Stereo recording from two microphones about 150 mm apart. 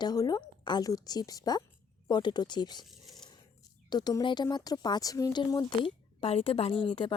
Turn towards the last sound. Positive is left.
turn(degrees=35)  # may be behind; listen again after turning